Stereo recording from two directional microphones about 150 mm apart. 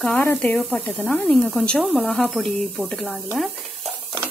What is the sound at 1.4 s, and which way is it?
Speech, 5° left (ahead or behind).